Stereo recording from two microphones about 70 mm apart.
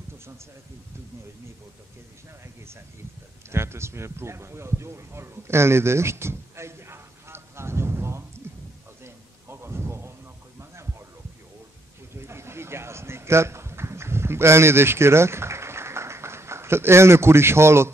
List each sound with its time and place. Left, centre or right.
3.4 s speech: right
9.0 s a sound: right
10.6 s heart sounds: right
12.2 s speech: right